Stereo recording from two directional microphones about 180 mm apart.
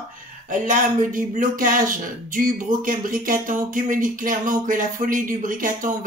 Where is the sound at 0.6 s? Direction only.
45° right (ahead or behind).